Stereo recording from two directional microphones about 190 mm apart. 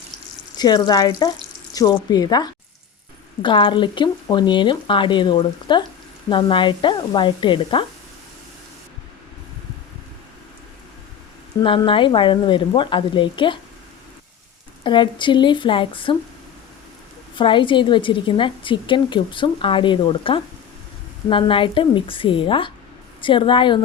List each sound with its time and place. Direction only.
0.5 s a woman's voice: 20° left (ahead or behind)
11.6 s a woman's voice: 25° left (ahead or behind)
14.8 s a woman's voice: 25° left (ahead or behind)
17.3 s a woman's voice: 25° left (ahead or behind)